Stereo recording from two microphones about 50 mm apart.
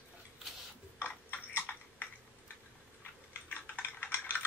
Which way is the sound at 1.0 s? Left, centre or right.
Left.